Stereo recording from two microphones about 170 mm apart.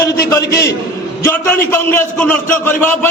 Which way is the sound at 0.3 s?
20° left (ahead or behind).